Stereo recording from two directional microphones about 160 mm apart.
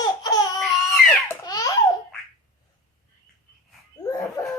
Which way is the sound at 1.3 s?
25° left (ahead or behind).